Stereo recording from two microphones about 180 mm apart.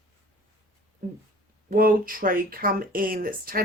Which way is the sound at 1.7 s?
55° right (ahead or behind).